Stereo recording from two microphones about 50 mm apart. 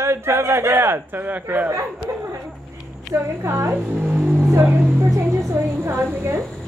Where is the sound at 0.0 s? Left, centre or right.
Right.